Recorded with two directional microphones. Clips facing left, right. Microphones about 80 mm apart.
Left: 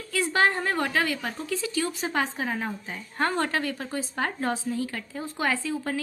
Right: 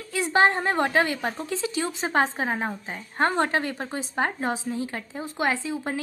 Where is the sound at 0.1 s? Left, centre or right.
Right.